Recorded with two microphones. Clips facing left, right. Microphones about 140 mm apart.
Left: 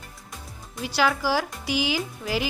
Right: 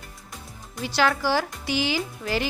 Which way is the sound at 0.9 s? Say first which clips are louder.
Right 1 dB; 5° left (ahead or behind).